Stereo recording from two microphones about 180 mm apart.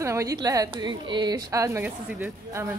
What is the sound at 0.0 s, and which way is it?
A woman's voice, 15° right (ahead or behind).